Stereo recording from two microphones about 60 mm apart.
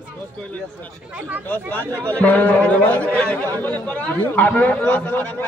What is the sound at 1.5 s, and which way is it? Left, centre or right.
A man's voice, left.